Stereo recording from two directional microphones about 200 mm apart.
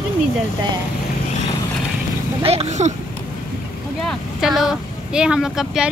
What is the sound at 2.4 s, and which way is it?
Speech, 30° right (ahead or behind).